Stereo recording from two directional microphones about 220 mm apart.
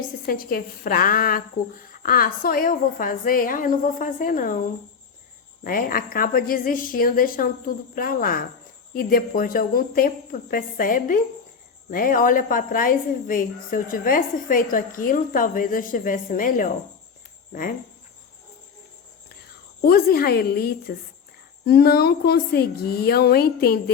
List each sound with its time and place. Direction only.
0.3 s a woman's voice: 40° left (ahead or behind)
5.6 s a woman's voice: 40° left (ahead or behind)
19.8 s a woman's voice: 45° left (ahead or behind)